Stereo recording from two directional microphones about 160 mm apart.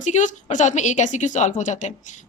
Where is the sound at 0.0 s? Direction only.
50° left (ahead or behind).